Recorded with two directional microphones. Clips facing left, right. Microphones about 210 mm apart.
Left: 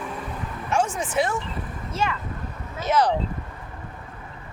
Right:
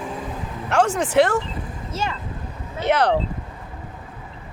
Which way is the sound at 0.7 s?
70° right (ahead or behind).